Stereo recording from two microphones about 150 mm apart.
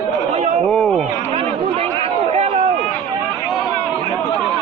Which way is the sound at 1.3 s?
40° right (ahead or behind).